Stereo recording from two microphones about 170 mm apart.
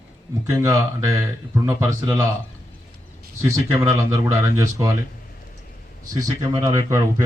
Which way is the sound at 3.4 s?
15° right (ahead or behind).